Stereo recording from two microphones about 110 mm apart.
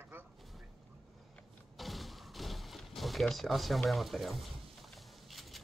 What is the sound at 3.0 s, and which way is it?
A man's voice, centre (ahead or behind).